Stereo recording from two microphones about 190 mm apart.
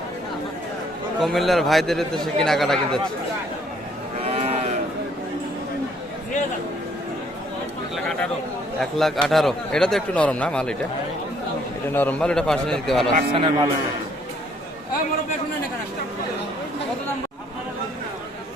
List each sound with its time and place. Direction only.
1.2 s speech: centre (ahead or behind)
4.2 s cattle: 30° right (ahead or behind)
7.9 s a sound: 5° left (ahead or behind)
8.8 s speech: centre (ahead or behind)
11.9 s speech: 5° left (ahead or behind)
13.3 s a man's voice: 25° right (ahead or behind)